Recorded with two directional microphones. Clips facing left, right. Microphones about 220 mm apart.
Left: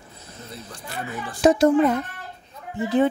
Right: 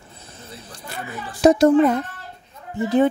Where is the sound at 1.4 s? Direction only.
40° right (ahead or behind).